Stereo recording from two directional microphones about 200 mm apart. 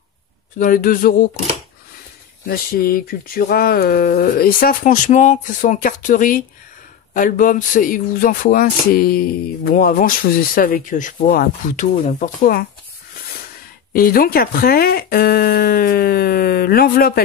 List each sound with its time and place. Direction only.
0.6 s speech: 45° left (ahead or behind)
2.4 s speech: 50° left (ahead or behind)
13.9 s speech: 45° left (ahead or behind)